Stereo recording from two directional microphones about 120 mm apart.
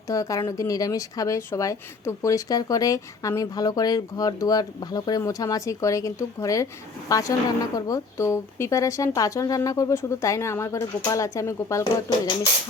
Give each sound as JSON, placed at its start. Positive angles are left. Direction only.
{"t": 0.1, "sound": "speech", "side_deg": 30}